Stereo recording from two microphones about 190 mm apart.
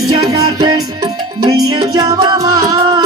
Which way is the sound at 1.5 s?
20° right (ahead or behind).